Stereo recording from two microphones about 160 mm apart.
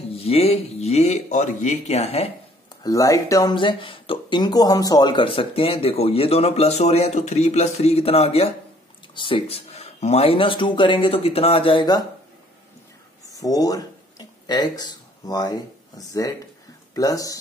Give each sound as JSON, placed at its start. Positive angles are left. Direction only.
{"t": 0.1, "sound": "speech", "side_deg": 40}
{"t": 2.8, "sound": "speech", "side_deg": 20}
{"t": 13.3, "sound": "a sound", "side_deg": 20}
{"t": 16.9, "sound": "speech", "side_deg": 20}